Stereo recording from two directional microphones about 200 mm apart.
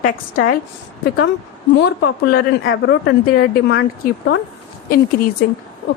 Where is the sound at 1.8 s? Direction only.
50° left (ahead or behind).